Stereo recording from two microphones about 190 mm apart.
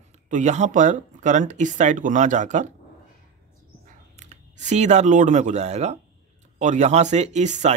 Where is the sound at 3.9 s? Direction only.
40° right (ahead or behind).